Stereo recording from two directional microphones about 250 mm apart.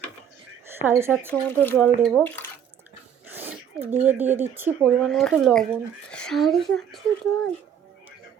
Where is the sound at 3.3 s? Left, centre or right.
Centre.